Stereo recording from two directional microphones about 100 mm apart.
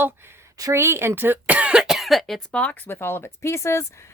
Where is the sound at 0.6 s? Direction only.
30° right (ahead or behind); by 2.4 s centre (ahead or behind).